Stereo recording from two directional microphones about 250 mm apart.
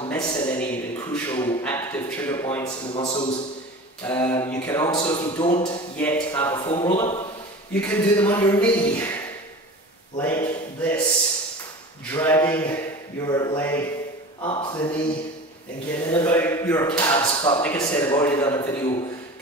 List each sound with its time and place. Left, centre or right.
0.1 s a sound: centre
0.6 s a man's voice: centre
4.0 s speech: centre
5.9 s speech: centre
6.5 s speech: centre
7.8 s speech: centre
12.1 s speech: centre
14.4 s speech: left
16.1 s speech: centre